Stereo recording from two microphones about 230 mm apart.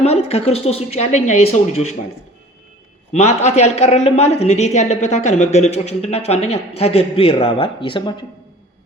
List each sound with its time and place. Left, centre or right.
0.0 s speech: left
3.1 s speech: left